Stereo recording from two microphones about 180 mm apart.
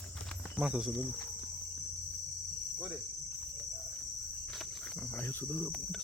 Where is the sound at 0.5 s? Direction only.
5° right (ahead or behind).